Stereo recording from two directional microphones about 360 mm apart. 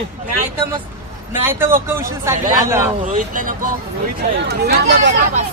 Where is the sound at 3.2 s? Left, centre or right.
Right.